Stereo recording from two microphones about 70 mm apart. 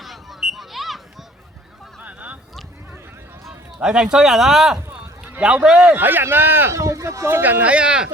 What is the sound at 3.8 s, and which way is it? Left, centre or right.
Speech, centre.